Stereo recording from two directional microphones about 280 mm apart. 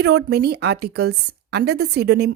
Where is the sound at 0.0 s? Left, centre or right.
Right.